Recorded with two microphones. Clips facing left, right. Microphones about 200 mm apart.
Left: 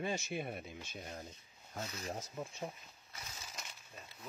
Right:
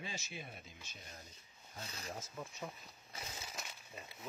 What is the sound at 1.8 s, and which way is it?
Speech, 30° left (ahead or behind).